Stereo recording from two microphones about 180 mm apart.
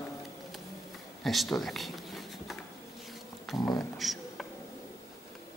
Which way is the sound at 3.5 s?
20° left (ahead or behind).